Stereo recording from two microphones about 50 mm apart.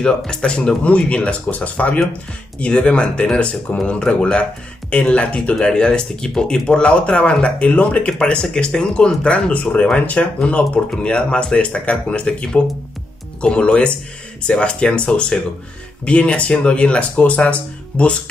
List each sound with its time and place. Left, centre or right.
0.0 s speech: centre
8.1 s speech: centre